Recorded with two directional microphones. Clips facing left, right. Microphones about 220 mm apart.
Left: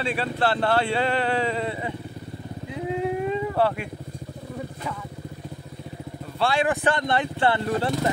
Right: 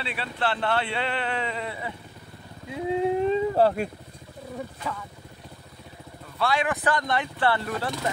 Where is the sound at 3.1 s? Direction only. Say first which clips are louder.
Right 2 dB; 30° right (ahead or behind).